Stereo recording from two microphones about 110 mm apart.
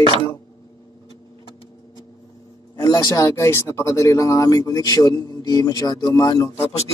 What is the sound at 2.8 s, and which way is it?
Speech, 35° left (ahead or behind).